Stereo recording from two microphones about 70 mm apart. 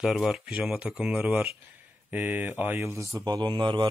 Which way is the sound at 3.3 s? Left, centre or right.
Right.